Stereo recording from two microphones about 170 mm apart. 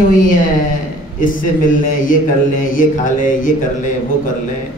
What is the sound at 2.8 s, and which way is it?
Speech, 50° left (ahead or behind).